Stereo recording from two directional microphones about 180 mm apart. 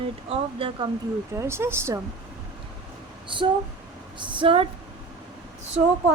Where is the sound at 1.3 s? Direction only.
15° right (ahead or behind).